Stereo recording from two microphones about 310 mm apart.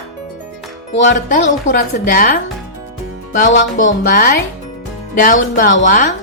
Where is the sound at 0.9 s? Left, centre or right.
Left.